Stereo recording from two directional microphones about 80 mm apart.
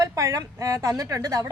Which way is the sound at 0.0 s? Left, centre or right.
Right.